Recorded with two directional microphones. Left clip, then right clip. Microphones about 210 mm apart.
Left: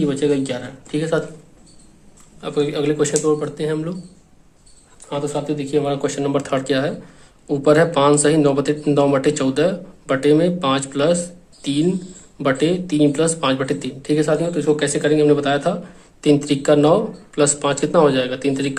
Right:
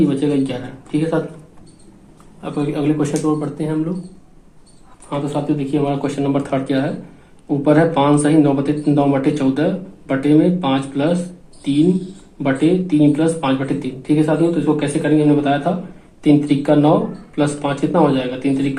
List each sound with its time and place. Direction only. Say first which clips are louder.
0.1 s speech: even; 40° left (ahead or behind)
2.4 s speech: left 1 dB; 30° left (ahead or behind)
5.0 s speech: right 2 dB; 25° left (ahead or behind)
12.4 s speech: right 2 dB; 35° left (ahead or behind)